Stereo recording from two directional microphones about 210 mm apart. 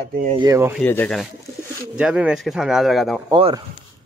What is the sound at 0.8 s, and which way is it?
Speech, 5° left (ahead or behind).